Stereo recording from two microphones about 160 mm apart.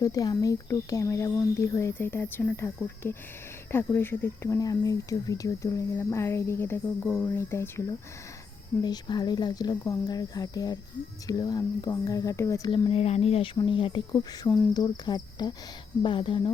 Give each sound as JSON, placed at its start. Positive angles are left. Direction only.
{"t": 0.0, "sound": "speech", "side_deg": 20}
{"t": 12.7, "sound": "speech", "side_deg": 35}